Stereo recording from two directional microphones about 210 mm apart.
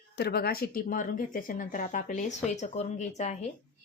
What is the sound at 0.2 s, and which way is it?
Speech, 50° left (ahead or behind).